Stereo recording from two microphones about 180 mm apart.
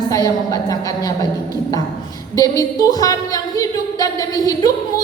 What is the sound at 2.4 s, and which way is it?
A woman's voice, 20° left (ahead or behind).